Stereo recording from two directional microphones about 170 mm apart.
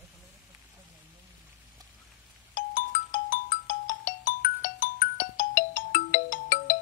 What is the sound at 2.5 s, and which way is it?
Music, 55° left (ahead or behind).